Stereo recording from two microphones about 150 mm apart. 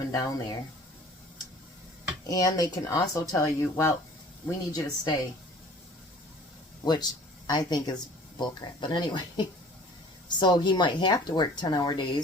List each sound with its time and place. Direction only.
0.1 s speech: 25° left (ahead or behind)
2.2 s speech: 25° left (ahead or behind)
6.8 s speech: 30° left (ahead or behind)